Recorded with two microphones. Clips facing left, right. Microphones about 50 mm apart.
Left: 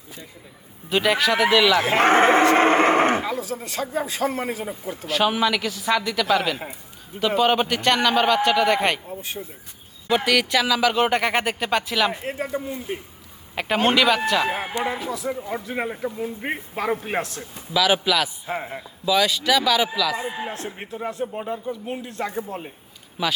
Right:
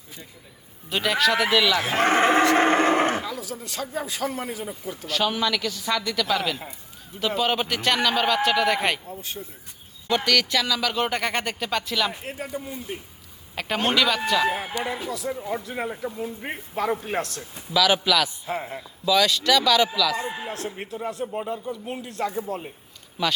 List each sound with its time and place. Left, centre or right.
0.9 s a man's voice: centre
1.8 s speech: left
5.0 s a man's voice: centre
9.0 s speech: left
10.2 s speech: centre
12.2 s a man's voice: left
13.6 s speech: centre
14.8 s speech: left
17.7 s speech: centre
18.4 s speech: left
18.8 s speech: centre
20.4 s speech: left
23.2 s speech: centre